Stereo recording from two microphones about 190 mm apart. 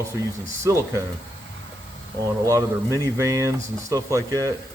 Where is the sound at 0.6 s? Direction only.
15° right (ahead or behind).